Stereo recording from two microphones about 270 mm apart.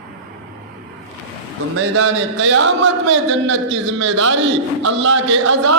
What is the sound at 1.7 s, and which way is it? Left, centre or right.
A man's voice, right.